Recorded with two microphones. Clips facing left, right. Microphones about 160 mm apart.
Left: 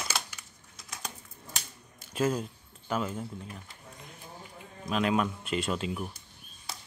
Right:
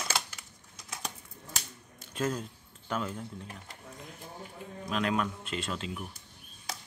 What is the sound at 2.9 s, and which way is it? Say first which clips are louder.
Speech: left 3 dB; 5° left (ahead or behind).